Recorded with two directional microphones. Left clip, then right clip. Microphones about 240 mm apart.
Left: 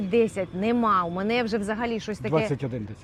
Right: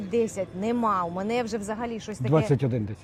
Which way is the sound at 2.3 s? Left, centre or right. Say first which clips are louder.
Right 2 dB; right.